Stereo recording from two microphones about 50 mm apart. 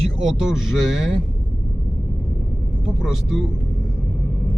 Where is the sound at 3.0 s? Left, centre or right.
Centre.